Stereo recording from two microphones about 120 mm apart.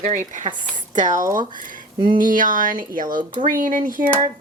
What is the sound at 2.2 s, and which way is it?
Speech, 90° right.